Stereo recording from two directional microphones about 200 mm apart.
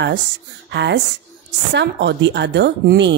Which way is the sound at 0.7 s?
60° right (ahead or behind).